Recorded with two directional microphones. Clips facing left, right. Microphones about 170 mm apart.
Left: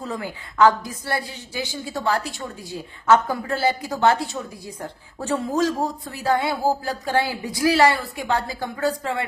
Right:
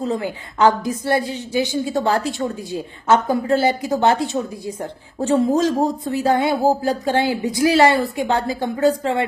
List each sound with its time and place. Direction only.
0.0 s a woman's voice: 25° right (ahead or behind)